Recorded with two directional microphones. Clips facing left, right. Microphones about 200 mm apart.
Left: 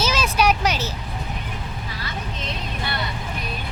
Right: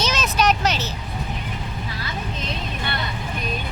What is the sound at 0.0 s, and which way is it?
Vehicle, 10° left (ahead or behind).